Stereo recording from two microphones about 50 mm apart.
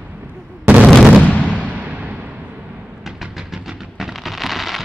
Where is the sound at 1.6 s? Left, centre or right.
Right.